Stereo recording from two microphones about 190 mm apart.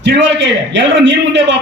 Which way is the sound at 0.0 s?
70° right (ahead or behind).